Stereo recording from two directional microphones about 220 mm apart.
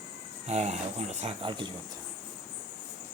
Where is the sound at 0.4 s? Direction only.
30° right (ahead or behind).